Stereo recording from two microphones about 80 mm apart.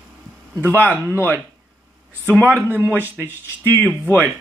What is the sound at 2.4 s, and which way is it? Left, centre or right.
Speech, right.